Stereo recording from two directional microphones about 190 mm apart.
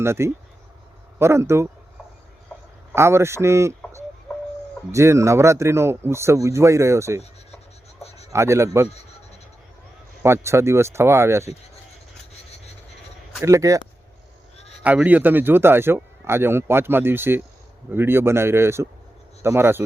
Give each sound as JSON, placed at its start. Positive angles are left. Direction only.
{"t": 0.0, "sound": "speech", "side_deg": -15}
{"t": 2.9, "sound": "speech", "side_deg": -15}
{"t": 8.3, "sound": "speech", "side_deg": -15}
{"t": 10.2, "sound": "speech", "side_deg": -15}
{"t": 13.4, "sound": "speech", "side_deg": -15}
{"t": 14.8, "sound": "speech", "side_deg": -10}